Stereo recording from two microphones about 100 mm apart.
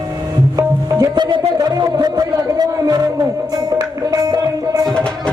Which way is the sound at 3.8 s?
40° right (ahead or behind).